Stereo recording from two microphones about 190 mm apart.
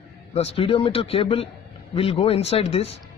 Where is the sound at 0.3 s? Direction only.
30° left (ahead or behind).